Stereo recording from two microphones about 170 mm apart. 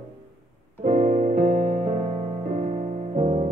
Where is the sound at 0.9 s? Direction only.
45° right (ahead or behind).